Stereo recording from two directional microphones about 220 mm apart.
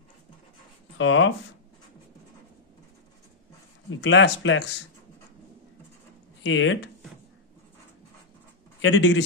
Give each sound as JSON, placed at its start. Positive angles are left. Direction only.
{"t": 0.9, "sound": "speech", "side_deg": 60}
{"t": 3.9, "sound": "speech", "side_deg": 55}
{"t": 6.4, "sound": "speech", "side_deg": 60}
{"t": 8.8, "sound": "speech", "side_deg": 55}